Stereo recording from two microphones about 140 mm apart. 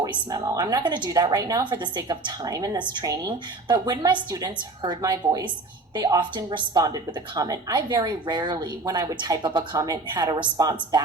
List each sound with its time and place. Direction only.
0.0 s a woman's voice: 25° right (ahead or behind)